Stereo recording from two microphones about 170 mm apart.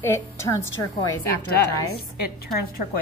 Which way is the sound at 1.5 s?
65° left (ahead or behind).